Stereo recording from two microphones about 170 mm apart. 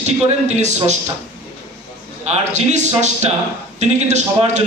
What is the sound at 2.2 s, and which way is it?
A man's voice, 40° right (ahead or behind).